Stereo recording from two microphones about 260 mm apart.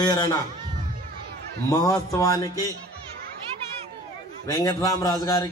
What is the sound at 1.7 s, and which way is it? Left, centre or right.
Speech, centre.